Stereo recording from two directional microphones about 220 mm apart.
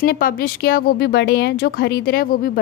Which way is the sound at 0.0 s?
40° left (ahead or behind).